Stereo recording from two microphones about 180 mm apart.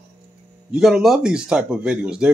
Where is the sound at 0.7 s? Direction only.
Centre (ahead or behind).